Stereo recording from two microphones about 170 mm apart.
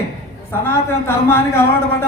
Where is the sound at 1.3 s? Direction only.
15° left (ahead or behind).